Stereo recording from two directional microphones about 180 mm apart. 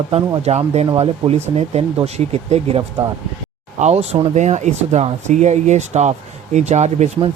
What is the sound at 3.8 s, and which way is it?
Speech, 35° right (ahead or behind).